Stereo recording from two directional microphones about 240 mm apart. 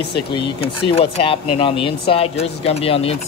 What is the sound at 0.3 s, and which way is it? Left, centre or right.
Speech, left.